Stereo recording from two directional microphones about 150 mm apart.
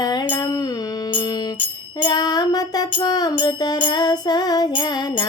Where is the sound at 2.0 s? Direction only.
25° left (ahead or behind).